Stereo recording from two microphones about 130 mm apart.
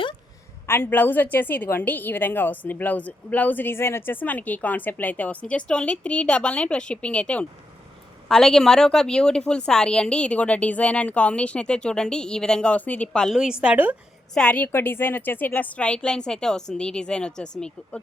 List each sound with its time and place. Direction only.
0.7 s a woman's voice: 15° left (ahead or behind); by 13.9 s 10° right (ahead or behind)
14.3 s a woman's voice: 10° left (ahead or behind)